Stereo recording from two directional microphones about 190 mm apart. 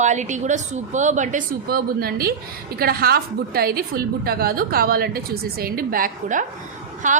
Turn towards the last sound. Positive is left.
turn(degrees=-40)  # may be behind; listen again after turning